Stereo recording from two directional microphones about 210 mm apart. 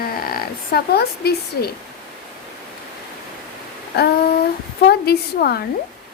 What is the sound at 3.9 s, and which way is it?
A woman's voice, 50° left (ahead or behind).